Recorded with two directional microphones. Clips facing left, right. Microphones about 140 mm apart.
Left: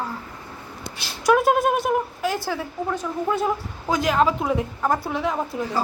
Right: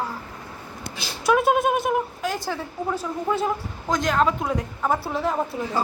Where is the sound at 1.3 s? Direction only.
Centre (ahead or behind).